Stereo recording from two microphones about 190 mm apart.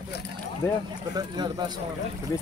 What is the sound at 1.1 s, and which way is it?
Speech, 20° right (ahead or behind).